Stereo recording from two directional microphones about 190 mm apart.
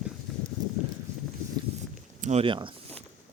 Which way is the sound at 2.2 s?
35° right (ahead or behind).